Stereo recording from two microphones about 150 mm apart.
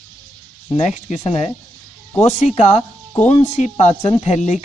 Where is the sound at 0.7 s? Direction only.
50° left (ahead or behind).